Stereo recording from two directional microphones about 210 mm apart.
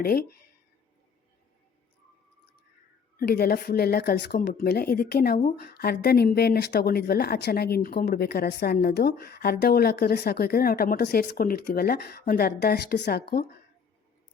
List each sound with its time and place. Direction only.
0.0 s a woman's voice: 45° left (ahead or behind)
3.2 s a woman's voice: 45° left (ahead or behind)